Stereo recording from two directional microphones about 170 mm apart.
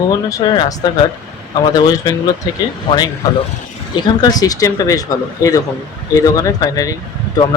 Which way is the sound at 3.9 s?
20° left (ahead or behind).